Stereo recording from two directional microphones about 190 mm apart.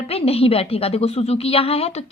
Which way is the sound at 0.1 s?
30° left (ahead or behind).